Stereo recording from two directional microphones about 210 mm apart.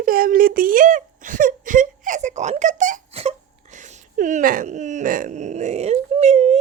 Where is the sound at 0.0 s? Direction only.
45° right (ahead or behind).